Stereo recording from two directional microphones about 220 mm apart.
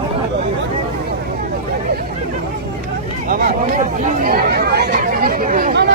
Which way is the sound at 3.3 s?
40° right (ahead or behind).